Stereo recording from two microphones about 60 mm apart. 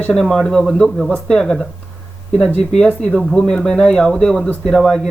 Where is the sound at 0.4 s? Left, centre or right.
Centre.